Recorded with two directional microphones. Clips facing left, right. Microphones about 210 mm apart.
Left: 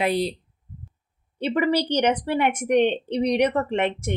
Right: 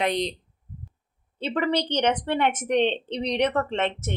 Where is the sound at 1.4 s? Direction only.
10° left (ahead or behind).